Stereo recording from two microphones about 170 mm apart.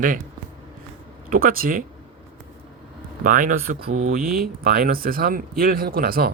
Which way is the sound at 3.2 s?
50° right (ahead or behind).